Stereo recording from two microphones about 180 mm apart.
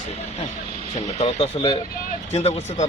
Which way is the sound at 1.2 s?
35° left (ahead or behind).